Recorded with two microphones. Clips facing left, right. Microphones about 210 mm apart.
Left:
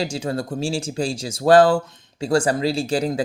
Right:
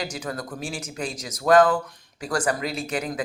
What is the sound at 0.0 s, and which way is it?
Speech, 30° left (ahead or behind).